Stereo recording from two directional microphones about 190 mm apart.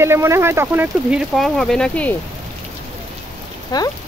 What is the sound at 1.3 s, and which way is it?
Speech, centre (ahead or behind).